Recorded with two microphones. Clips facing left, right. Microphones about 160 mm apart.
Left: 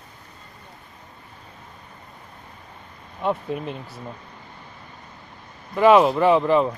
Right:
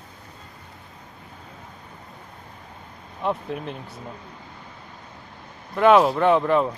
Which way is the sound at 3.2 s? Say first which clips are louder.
Left 2 dB; centre (ahead or behind).